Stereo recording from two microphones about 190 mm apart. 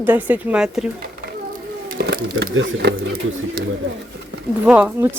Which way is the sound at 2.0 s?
55° right (ahead or behind).